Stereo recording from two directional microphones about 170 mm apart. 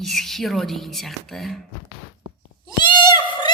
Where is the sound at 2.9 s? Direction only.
25° left (ahead or behind).